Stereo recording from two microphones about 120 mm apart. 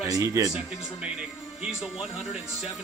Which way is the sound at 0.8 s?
5° right (ahead or behind).